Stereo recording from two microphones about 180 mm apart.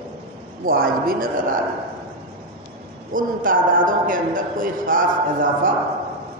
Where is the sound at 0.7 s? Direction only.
55° right (ahead or behind).